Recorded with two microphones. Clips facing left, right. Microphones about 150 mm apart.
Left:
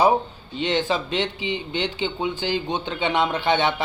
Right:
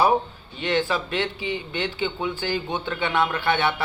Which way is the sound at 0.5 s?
20° left (ahead or behind).